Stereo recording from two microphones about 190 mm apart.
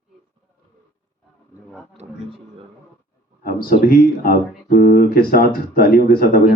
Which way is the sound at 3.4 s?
50° left (ahead or behind).